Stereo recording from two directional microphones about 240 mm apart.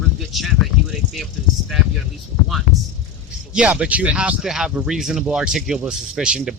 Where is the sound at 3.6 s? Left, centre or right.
Centre.